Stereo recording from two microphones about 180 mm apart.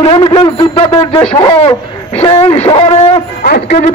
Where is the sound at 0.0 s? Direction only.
30° left (ahead or behind).